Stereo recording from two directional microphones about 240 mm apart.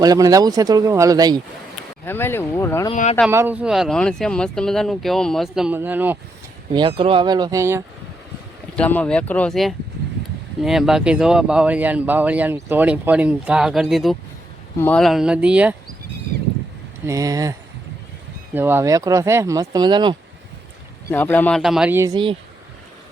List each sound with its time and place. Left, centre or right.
0.0 s speech: centre
2.0 s speech: centre
2.9 s speech: left
3.2 s speech: centre
6.7 s speech: right
8.7 s speech: centre
17.1 s speech: centre
18.5 s speech: centre
21.1 s speech: centre